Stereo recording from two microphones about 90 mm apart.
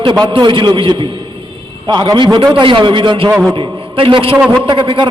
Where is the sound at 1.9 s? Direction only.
55° right (ahead or behind); by 4.4 s 80° right.